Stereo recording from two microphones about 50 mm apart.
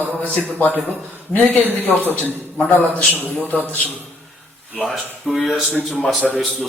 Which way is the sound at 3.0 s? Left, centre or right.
Left.